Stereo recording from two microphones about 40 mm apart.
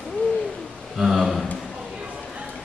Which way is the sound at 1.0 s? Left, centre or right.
Centre.